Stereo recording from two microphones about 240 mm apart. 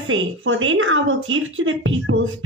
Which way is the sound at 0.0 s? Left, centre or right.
Right.